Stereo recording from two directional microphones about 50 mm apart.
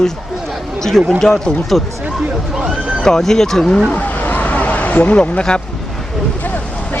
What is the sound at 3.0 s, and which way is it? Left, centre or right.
Speech, centre.